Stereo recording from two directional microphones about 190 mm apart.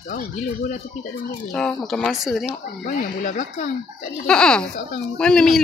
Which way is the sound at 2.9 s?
40° left (ahead or behind).